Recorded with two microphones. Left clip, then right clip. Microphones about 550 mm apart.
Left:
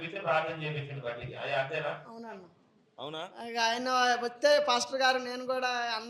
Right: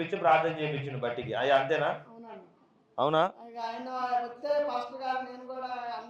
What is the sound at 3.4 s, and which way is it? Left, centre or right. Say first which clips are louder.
A man's voice: left 7 dB; left.